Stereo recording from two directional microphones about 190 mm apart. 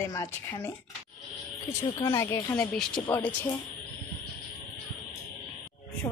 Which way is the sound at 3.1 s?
20° left (ahead or behind).